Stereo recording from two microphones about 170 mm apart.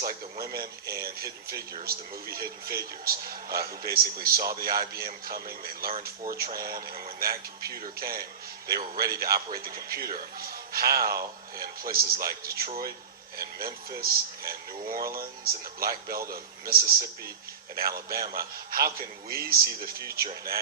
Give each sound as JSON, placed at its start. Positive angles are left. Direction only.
{"t": 0.0, "sound": "speech", "side_deg": -60}